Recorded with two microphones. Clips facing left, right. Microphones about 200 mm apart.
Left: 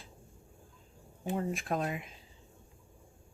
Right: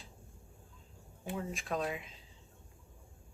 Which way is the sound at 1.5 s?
50° left (ahead or behind).